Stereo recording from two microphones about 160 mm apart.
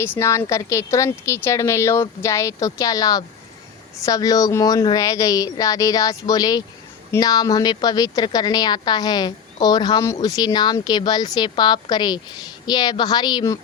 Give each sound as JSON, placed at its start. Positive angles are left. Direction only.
{"t": 0.2, "sound": "a woman's voice", "side_deg": 20}